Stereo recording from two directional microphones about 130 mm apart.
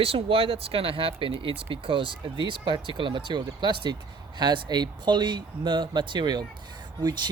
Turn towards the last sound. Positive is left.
turn(degrees=-35)  # may be behind; listen again after turning